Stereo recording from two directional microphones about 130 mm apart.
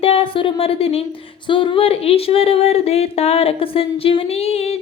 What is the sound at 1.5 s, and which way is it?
Speech, 40° left (ahead or behind).